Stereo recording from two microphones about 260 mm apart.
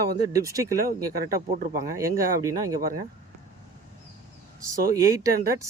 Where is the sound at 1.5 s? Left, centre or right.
Right.